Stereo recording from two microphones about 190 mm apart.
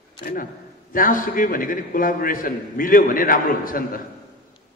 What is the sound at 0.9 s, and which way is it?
A man's voice, 45° left (ahead or behind).